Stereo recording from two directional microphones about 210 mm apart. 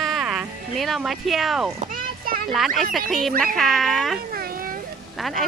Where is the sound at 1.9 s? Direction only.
45° right (ahead or behind).